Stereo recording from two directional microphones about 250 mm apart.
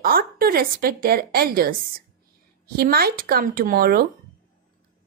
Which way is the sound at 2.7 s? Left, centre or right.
Right.